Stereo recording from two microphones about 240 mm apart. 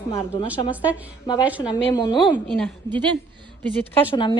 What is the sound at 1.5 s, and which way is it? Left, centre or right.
Speech, centre.